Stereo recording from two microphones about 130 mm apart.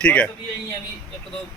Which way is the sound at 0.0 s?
10° left (ahead or behind).